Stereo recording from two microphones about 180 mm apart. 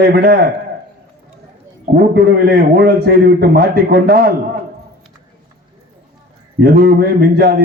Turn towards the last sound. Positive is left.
turn(degrees=-60)  # may be behind; listen again after turning